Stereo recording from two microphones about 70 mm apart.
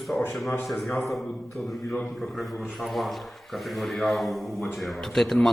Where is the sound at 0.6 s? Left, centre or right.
Centre.